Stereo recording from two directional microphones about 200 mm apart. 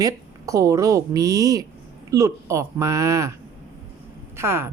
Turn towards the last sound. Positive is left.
turn(degrees=-10)  # may be behind; listen again after turning